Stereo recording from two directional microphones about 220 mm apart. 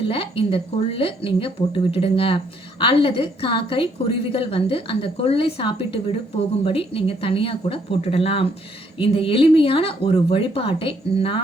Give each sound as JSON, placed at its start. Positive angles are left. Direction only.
{"t": 0.1, "sound": "speech", "side_deg": 25}